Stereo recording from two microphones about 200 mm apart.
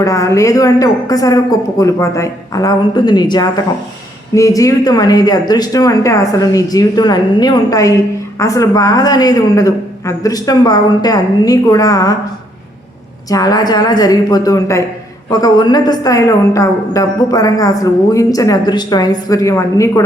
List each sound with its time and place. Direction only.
0.0 s speech: 15° left (ahead or behind)
13.3 s a woman's voice: 20° left (ahead or behind)